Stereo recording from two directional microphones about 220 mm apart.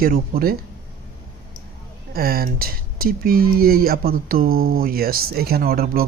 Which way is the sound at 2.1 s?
45° right (ahead or behind).